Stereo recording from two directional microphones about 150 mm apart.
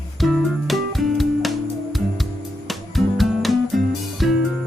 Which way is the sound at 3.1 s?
Centre (ahead or behind).